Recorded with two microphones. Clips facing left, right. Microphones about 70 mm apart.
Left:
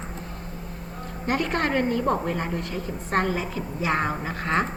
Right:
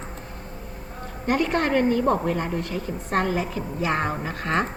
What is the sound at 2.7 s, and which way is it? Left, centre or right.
Speech, left.